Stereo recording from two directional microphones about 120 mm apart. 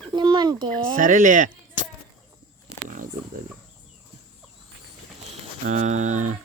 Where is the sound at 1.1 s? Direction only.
90° right.